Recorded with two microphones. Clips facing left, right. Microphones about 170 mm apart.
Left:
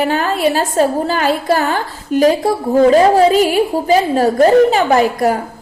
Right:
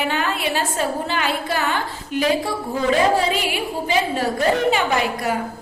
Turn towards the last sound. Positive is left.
turn(degrees=40)  # may be behind; listen again after turning